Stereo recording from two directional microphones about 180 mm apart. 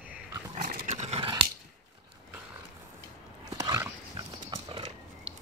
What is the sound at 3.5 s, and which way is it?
Horse, 20° right (ahead or behind).